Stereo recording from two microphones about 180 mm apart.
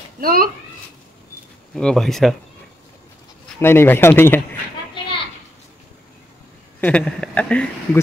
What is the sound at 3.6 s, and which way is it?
Speech, 15° left (ahead or behind).